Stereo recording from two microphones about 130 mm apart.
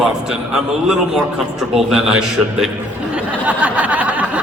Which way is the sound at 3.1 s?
10° right (ahead or behind).